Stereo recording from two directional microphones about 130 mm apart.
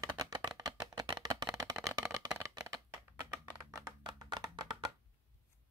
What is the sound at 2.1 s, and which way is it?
Shuffling cards, 25° right (ahead or behind).